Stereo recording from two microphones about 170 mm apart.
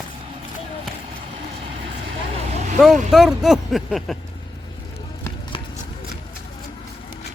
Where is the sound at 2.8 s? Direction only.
Centre (ahead or behind).